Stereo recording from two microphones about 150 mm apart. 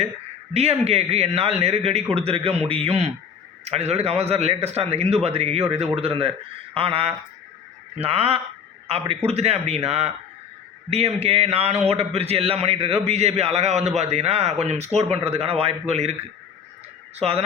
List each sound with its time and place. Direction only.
0.5 s a man's voice: 45° right (ahead or behind)
17.2 s a man's voice: 40° right (ahead or behind)